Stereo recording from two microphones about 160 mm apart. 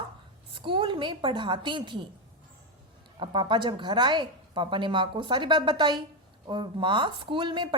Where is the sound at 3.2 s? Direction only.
30° right (ahead or behind).